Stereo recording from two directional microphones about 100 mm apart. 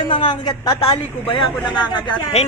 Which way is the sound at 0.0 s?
55° left (ahead or behind).